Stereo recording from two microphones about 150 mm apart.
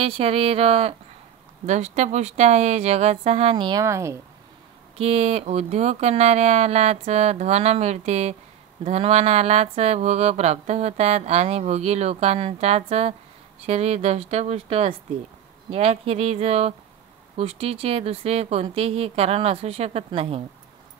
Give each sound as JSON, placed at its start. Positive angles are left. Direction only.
{"t": 0.0, "sound": "speech", "side_deg": -40}
{"t": 3.8, "sound": "speech", "side_deg": -20}
{"t": 4.9, "sound": "speech", "side_deg": -45}